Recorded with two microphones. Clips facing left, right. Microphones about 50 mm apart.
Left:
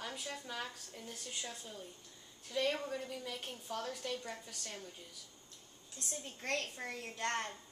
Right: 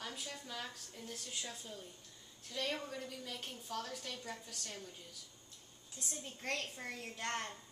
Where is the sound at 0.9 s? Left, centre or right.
Centre.